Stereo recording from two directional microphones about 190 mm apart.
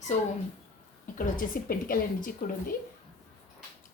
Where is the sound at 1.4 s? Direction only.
50° left (ahead or behind).